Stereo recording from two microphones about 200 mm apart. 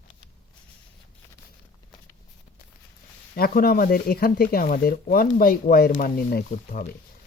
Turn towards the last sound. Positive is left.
turn(degrees=40)  # may be behind; listen again after turning